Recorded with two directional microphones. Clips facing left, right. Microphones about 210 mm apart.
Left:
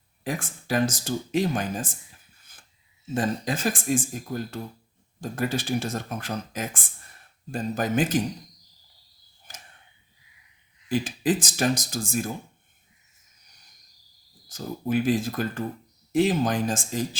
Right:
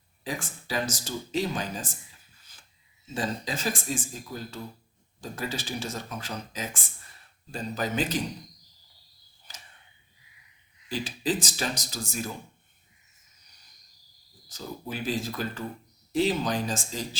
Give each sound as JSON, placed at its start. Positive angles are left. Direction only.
{"t": 0.3, "sound": "speech", "side_deg": 55}
{"t": 2.4, "sound": "a sound", "side_deg": 55}
{"t": 3.2, "sound": "speech", "side_deg": 55}
{"t": 9.5, "sound": "a sound", "side_deg": 50}
{"t": 10.8, "sound": "speech", "side_deg": 50}
{"t": 14.5, "sound": "speech", "side_deg": 50}